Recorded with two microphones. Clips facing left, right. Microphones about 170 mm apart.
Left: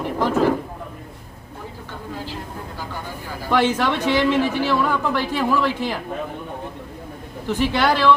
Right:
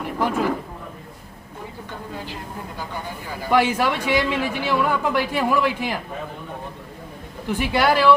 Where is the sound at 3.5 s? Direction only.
10° right (ahead or behind).